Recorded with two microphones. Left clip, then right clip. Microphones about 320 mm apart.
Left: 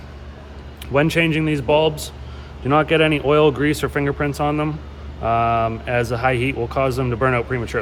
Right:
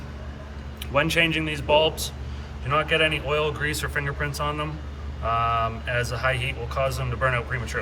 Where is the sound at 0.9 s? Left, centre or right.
Left.